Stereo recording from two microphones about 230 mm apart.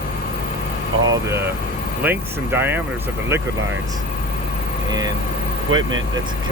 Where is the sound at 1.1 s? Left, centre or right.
Centre.